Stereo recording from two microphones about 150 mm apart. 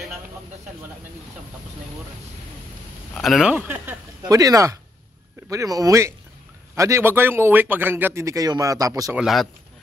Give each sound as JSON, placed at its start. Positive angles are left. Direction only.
{"t": 3.2, "sound": "speech", "side_deg": 0}
{"t": 3.5, "sound": "speech", "side_deg": -10}
{"t": 4.3, "sound": "a man's voice", "side_deg": -25}
{"t": 9.1, "sound": "speech", "side_deg": 0}